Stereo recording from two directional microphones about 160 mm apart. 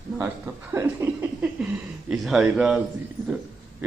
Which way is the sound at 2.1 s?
Centre (ahead or behind).